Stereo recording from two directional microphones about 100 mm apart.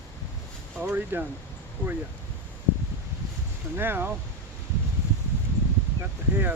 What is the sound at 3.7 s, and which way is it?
Speech, 20° right (ahead or behind).